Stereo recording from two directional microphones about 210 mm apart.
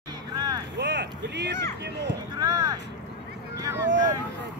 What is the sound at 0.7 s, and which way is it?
Vehicle, 55° right (ahead or behind).